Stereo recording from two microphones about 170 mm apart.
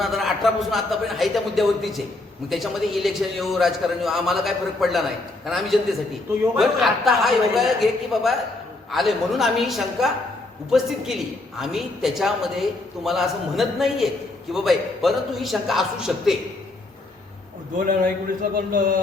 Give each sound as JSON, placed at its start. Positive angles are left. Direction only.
{"t": 0.0, "sound": "a man's voice", "side_deg": 0}
{"t": 17.7, "sound": "a man's voice", "side_deg": -55}